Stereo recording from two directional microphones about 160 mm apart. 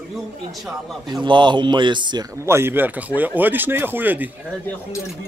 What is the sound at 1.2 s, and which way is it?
Speech, 30° right (ahead or behind).